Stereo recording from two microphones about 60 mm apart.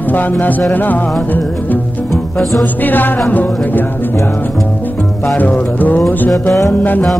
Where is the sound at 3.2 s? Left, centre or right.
Left.